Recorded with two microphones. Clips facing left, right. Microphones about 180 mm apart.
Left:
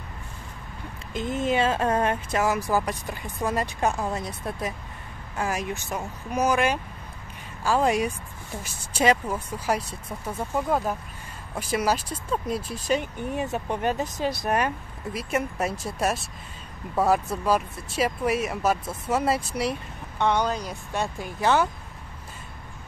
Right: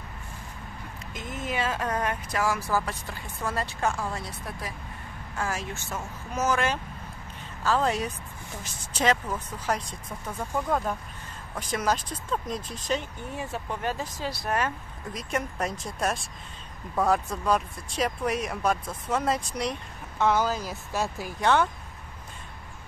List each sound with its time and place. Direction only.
1.1 s speech: 30° left (ahead or behind)
15.1 s speech: 5° left (ahead or behind)